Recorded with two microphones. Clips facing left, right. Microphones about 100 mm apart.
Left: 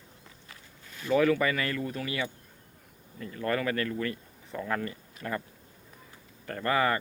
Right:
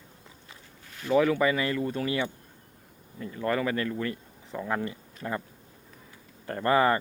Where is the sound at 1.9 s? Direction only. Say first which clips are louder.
Right 4 dB; 30° right (ahead or behind).